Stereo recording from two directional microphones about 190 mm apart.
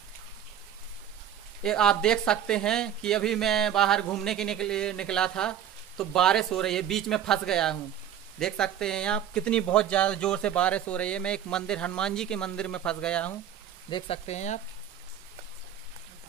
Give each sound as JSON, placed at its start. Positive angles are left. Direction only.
{"t": 1.6, "sound": "speech", "side_deg": 5}
{"t": 13.8, "sound": "speech", "side_deg": 25}